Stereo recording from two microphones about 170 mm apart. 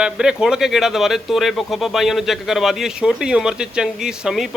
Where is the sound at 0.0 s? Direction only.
5° right (ahead or behind).